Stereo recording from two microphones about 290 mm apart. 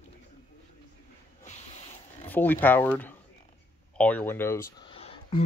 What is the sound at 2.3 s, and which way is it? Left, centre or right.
Speech, centre.